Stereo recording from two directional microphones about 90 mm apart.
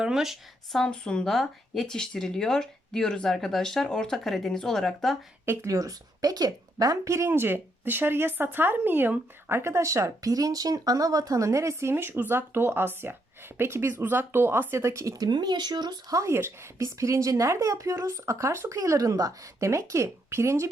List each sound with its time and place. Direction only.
0.0 s speech: 5° right (ahead or behind)
5.5 s a woman's voice: 35° right (ahead or behind)
15.3 s speech: 55° right (ahead or behind); by 20.7 s 30° right (ahead or behind)